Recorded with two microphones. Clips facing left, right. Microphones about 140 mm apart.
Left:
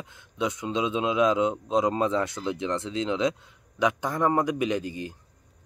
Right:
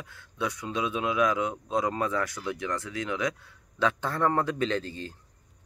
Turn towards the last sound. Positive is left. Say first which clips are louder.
# left 2 dB
turn(degrees=15)  # may be behind; listen again after turning